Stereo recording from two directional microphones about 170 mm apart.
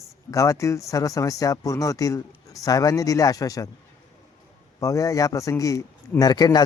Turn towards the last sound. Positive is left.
turn(degrees=25)  # may be behind; listen again after turning